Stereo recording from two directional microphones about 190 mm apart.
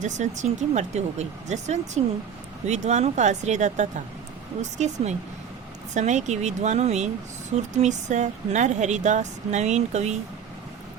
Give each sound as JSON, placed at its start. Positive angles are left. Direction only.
{"t": 0.0, "sound": "speech", "side_deg": -40}